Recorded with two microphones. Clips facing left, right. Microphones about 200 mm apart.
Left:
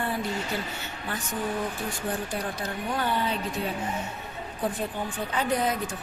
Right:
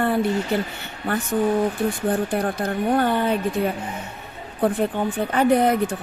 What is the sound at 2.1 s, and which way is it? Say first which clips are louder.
A woman's voice: right 9 dB; 55° right (ahead or behind).